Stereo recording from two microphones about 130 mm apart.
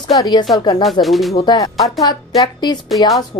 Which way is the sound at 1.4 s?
30° left (ahead or behind).